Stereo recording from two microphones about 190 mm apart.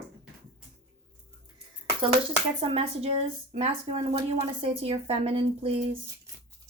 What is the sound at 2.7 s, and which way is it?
A woman's voice, 30° right (ahead or behind).